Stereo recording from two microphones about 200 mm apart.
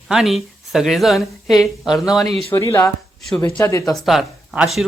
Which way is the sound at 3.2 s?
5° left (ahead or behind).